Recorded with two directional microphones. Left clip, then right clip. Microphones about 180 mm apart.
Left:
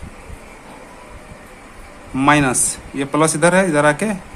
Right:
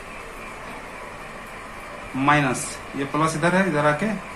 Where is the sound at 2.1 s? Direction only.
60° left (ahead or behind).